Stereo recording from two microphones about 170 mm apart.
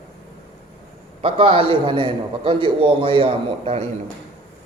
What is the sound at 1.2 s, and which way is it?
A man's voice, 35° right (ahead or behind).